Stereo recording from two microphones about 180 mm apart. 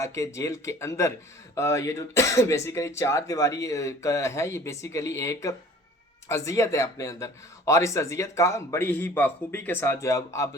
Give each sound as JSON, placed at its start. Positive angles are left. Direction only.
{"t": 0.0, "sound": "speech", "side_deg": 15}